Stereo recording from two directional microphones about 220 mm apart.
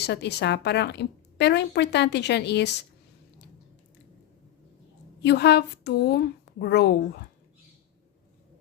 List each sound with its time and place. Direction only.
0.0 s speech: 50° left (ahead or behind)
5.2 s speech: 50° left (ahead or behind)